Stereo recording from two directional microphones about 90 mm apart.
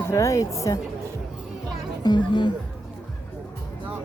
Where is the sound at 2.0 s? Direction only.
55° left (ahead or behind).